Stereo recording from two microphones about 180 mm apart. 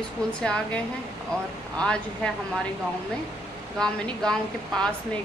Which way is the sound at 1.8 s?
5° left (ahead or behind).